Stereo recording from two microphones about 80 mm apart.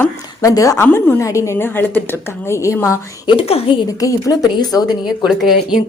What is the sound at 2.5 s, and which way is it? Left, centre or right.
Speech, left.